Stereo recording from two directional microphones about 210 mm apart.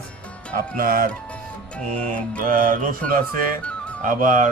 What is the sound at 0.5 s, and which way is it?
Speech, 45° right (ahead or behind).